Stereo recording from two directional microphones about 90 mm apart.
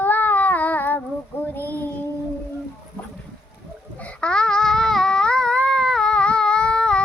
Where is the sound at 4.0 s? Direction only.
10° left (ahead or behind).